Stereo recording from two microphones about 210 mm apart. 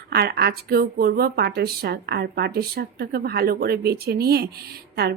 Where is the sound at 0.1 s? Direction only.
50° right (ahead or behind).